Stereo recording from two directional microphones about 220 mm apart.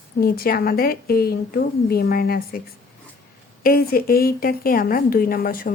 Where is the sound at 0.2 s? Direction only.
45° left (ahead or behind).